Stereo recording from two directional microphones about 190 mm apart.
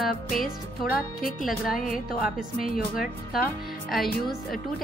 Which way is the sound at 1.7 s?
45° left (ahead or behind).